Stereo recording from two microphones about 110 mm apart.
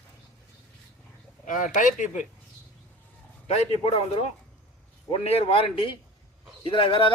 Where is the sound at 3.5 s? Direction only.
70° left (ahead or behind).